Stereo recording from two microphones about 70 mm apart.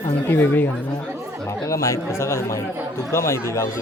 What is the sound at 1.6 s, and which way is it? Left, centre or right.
Speech, left.